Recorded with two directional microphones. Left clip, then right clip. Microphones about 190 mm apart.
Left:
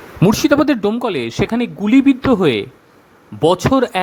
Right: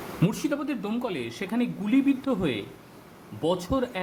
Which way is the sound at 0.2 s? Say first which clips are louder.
Left 16 dB; 45° left (ahead or behind).